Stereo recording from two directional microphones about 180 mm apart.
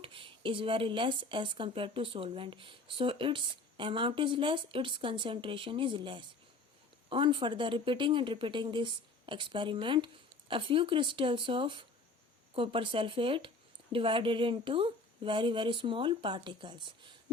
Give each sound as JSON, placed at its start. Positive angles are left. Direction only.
{"t": 0.0, "sound": "speech", "side_deg": -30}